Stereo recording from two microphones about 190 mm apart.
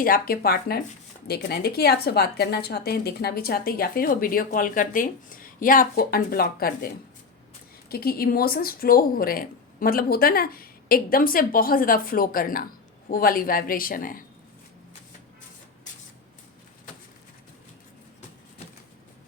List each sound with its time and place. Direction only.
0.0 s a woman's voice: 50° left (ahead or behind)